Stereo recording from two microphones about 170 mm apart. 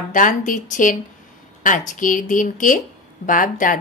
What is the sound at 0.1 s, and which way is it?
A woman's voice, 50° left (ahead or behind).